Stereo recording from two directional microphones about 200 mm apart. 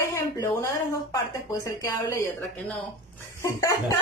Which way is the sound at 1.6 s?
15° left (ahead or behind).